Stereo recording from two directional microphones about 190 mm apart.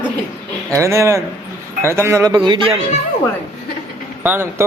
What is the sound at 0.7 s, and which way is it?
Speech, 15° right (ahead or behind).